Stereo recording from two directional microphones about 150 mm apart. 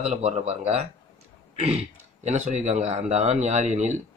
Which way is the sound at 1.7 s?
50° right (ahead or behind).